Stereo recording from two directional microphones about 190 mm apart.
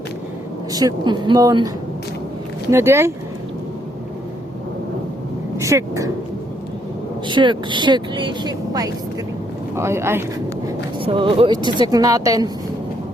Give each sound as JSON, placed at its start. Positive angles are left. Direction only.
{"t": 0.7, "sound": "speech", "side_deg": -20}
{"t": 5.5, "sound": "speech", "side_deg": -15}
{"t": 7.3, "sound": "speech", "side_deg": -25}
{"t": 10.7, "sound": "speech", "side_deg": -25}